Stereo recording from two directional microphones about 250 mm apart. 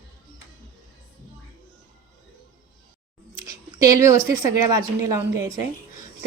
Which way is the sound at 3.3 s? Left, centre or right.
Centre.